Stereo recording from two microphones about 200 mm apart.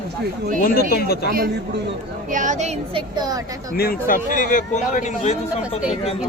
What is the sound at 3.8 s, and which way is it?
Speech, 45° left (ahead or behind).